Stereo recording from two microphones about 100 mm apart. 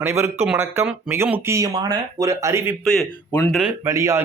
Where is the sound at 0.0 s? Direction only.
25° right (ahead or behind).